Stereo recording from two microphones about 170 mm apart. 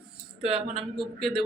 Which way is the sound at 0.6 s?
35° right (ahead or behind).